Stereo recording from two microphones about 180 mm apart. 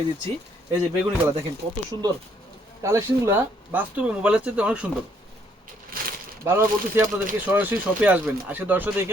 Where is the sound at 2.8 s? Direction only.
15° right (ahead or behind).